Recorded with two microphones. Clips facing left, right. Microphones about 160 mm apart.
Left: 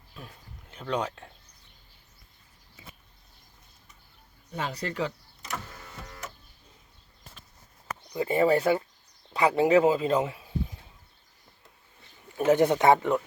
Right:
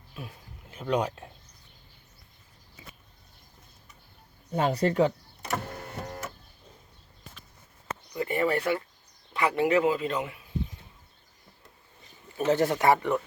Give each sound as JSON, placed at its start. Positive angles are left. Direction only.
{"t": 0.7, "sound": "speech", "side_deg": -10}
{"t": 4.5, "sound": "power windows", "side_deg": -55}
{"t": 8.1, "sound": "speech", "side_deg": 25}
{"t": 12.4, "sound": "speech", "side_deg": 15}